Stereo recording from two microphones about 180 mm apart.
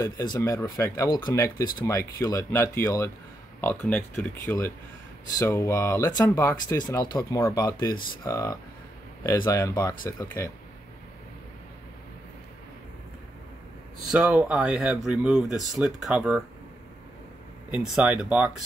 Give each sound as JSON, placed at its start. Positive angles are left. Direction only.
{"t": 0.0, "sound": "speech", "side_deg": 20}
{"t": 14.0, "sound": "speech", "side_deg": -5}
{"t": 17.6, "sound": "speech", "side_deg": -5}